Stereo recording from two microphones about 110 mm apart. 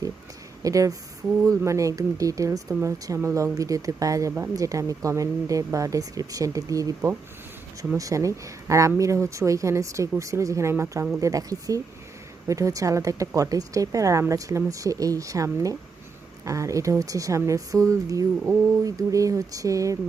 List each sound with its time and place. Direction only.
0.6 s a woman's voice: 30° right (ahead or behind)